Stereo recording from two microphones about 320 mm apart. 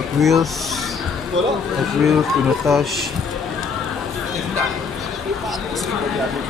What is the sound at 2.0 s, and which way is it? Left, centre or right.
Speech, centre.